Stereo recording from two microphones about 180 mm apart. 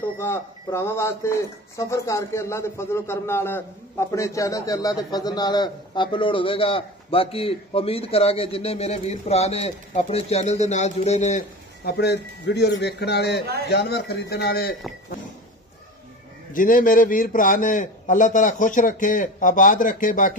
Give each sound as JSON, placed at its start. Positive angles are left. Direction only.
{"t": 0.2, "sound": "speech", "side_deg": 15}
{"t": 11.8, "sound": "a man's voice", "side_deg": 65}
{"t": 16.5, "sound": "a man's voice", "side_deg": 50}